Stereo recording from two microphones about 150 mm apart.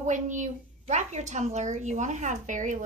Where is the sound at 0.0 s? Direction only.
55° right (ahead or behind).